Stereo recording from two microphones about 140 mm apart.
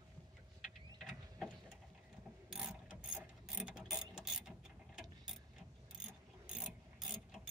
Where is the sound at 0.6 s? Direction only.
Centre (ahead or behind).